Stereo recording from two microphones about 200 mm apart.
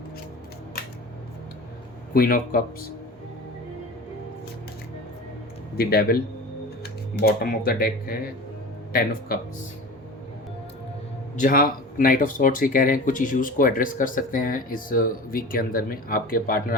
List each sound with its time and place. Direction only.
2.1 s speech: 45° left (ahead or behind)
5.7 s a man's voice: 50° left (ahead or behind)
11.3 s speech: 45° left (ahead or behind)